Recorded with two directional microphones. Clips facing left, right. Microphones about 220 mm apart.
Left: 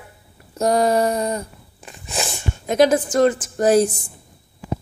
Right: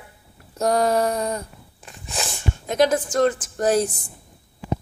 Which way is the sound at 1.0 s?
15° left (ahead or behind).